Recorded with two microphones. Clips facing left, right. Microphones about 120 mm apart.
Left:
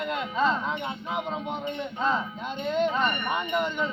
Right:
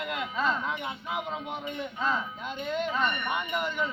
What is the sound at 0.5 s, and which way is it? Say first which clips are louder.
Speech: left 3 dB; 25° left (ahead or behind).